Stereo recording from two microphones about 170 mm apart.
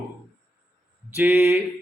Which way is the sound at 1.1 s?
15° right (ahead or behind).